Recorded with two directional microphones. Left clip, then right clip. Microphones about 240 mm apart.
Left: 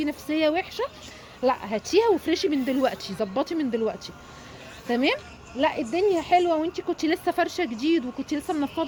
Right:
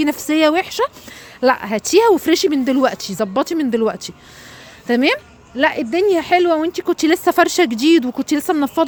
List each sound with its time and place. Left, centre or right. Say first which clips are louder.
0.0 s a woman's voice: right 9 dB; right